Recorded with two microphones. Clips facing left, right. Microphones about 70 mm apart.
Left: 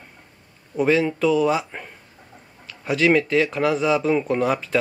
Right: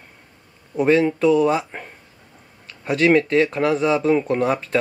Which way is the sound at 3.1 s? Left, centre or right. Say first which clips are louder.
Right 2 dB; right.